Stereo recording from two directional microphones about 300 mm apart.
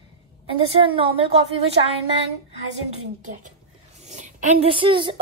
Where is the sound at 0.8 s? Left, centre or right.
Centre.